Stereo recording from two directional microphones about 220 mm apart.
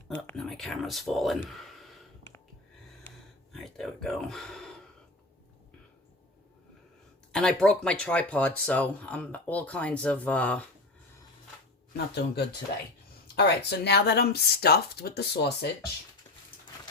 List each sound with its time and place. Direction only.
0.1 s speech: 5° left (ahead or behind)
3.5 s speech: centre (ahead or behind)
7.3 s speech: 5° left (ahead or behind)
11.9 s speech: 50° left (ahead or behind)